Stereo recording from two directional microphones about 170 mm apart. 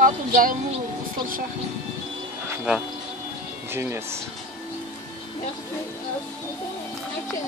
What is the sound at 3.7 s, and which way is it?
Speech, 15° right (ahead or behind).